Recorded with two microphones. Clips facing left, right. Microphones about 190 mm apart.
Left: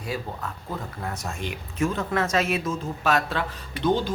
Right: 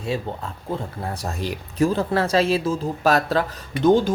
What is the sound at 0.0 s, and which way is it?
Speech, 25° right (ahead or behind).